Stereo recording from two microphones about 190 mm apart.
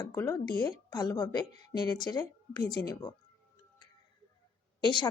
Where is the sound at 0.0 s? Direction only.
15° left (ahead or behind).